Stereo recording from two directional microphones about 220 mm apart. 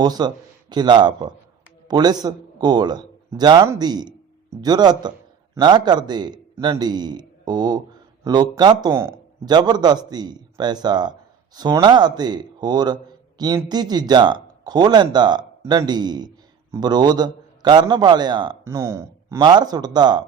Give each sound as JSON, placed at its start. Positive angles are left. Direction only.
{"t": 0.0, "sound": "a man's voice", "side_deg": -20}